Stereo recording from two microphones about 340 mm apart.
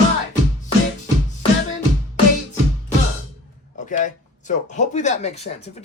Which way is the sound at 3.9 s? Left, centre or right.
Left.